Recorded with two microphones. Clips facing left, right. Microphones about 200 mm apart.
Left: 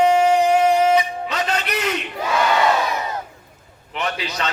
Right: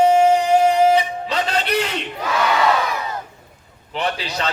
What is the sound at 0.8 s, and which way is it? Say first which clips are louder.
Music: right 1 dB; 30° right (ahead or behind).